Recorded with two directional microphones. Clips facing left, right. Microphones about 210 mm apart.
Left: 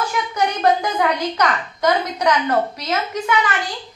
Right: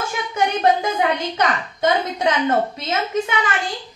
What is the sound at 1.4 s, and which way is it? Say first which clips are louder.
A child's voice: even; 25° right (ahead or behind).